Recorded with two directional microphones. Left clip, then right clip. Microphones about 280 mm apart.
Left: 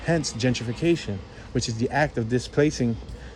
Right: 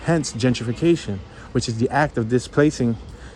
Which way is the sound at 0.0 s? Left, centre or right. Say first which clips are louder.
Right 3 dB; centre.